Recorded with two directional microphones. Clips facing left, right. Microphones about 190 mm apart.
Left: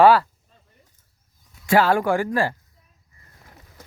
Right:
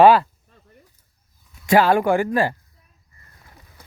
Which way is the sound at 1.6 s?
20° right (ahead or behind).